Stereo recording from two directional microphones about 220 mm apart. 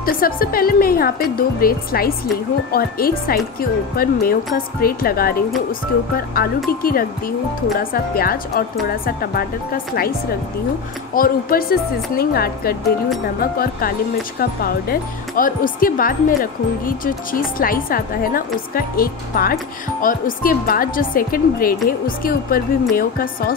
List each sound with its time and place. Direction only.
0.0 s speech: 40° left (ahead or behind)
11.1 s speech: 40° left (ahead or behind)